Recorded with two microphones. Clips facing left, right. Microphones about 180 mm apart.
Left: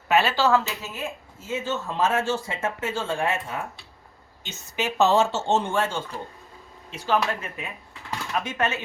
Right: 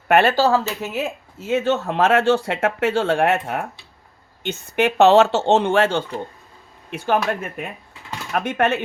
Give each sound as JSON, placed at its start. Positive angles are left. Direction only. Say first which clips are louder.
{"t": 0.1, "sound": "speech", "louder": "right 6 dB", "side_deg": -60}
{"t": 0.3, "sound": "speech", "louder": "right 4 dB", "side_deg": -35}
{"t": 0.8, "sound": "speech", "louder": "right 8 dB", "side_deg": -70}
{"t": 4.4, "sound": "speech", "louder": "right 9 dB", "side_deg": -60}
{"t": 6.9, "sound": "speech", "louder": "right 4 dB", "side_deg": -55}